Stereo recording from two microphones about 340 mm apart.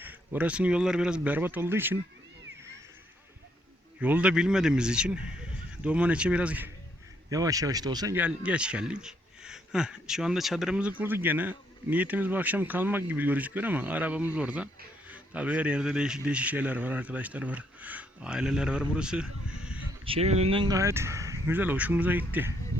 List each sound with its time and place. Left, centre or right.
0.0 s speech: centre
4.0 s speech: centre
20.1 s speech: centre